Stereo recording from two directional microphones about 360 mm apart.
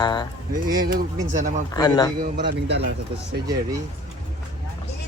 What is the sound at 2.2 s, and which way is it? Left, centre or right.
A man's voice, right.